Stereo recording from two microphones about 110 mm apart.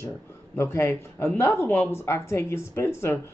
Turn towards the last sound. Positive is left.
turn(degrees=25)  # may be behind; listen again after turning